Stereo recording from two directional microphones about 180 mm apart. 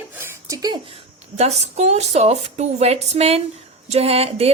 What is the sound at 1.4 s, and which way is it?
Speech, 35° right (ahead or behind).